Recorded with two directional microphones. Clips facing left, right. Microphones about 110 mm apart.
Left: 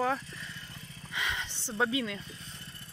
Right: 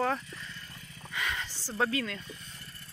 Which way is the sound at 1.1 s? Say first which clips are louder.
Even; 25° left (ahead or behind).